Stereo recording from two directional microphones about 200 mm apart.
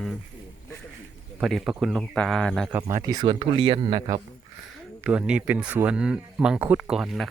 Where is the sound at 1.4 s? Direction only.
Centre (ahead or behind).